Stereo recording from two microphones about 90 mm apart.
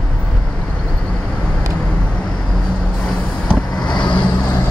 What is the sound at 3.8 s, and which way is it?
Vehicle, 55° left (ahead or behind).